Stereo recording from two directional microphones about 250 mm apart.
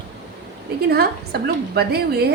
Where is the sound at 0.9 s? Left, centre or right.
Right.